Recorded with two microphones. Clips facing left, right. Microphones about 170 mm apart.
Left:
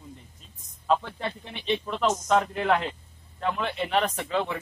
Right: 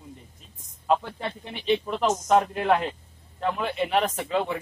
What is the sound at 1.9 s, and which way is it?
Speech, 15° right (ahead or behind).